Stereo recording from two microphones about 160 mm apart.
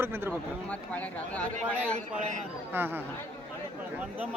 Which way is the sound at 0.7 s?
10° left (ahead or behind).